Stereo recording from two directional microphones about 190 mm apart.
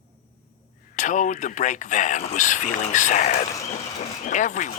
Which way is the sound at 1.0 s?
40° left (ahead or behind).